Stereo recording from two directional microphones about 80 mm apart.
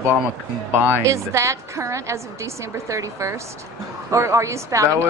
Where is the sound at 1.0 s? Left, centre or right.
Right.